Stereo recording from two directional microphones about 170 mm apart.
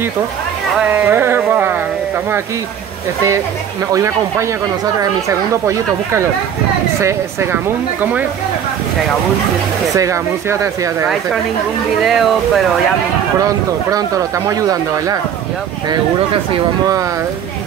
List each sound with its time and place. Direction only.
0.7 s a sound: 10° right (ahead or behind)
3.9 s speech: 15° right (ahead or behind)
5.5 s speech: 15° right (ahead or behind)
9.9 s speech: 20° right (ahead or behind)
12.0 s speech: centre (ahead or behind)
13.4 s speech: 20° right (ahead or behind)